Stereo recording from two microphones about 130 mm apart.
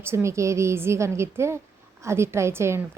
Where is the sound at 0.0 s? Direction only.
20° right (ahead or behind).